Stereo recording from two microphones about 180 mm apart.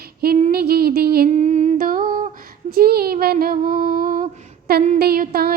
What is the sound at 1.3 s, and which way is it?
Humming, 40° right (ahead or behind).